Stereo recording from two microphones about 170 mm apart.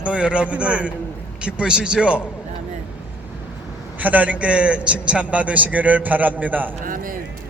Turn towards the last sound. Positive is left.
turn(degrees=-55)  # may be behind; listen again after turning